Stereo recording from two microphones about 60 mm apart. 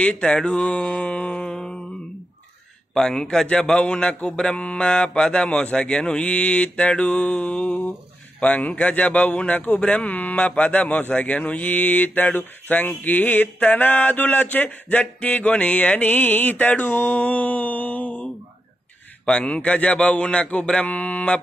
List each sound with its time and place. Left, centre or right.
0.0 s mantra: left
2.9 s a man's voice: centre; by 18.2 s left
19.2 s speech: centre